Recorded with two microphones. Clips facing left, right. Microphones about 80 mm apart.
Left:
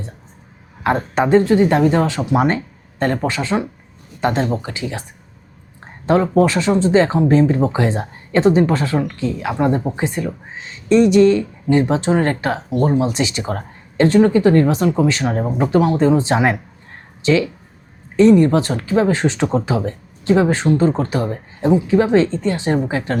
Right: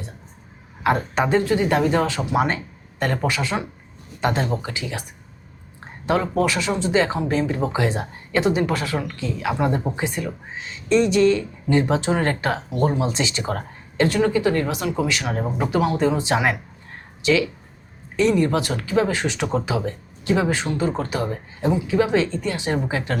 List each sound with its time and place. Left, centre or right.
0.9 s speech: left
6.1 s speech: left
14.0 s speech: left